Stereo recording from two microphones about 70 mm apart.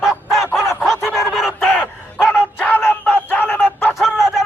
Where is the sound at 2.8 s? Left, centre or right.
Left.